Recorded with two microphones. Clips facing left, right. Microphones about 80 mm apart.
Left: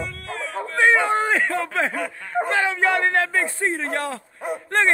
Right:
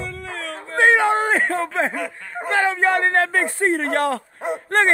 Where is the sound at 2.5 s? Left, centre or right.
Right.